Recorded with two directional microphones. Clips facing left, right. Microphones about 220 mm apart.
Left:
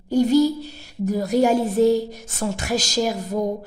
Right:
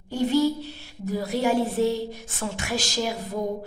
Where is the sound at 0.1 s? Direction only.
40° left (ahead or behind).